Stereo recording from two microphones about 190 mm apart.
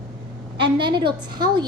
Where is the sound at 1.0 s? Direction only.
25° right (ahead or behind).